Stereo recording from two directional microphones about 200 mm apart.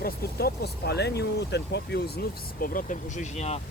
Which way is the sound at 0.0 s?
50° left (ahead or behind).